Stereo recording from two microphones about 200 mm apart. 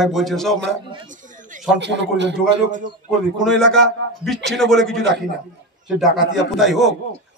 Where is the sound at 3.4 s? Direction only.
Centre (ahead or behind).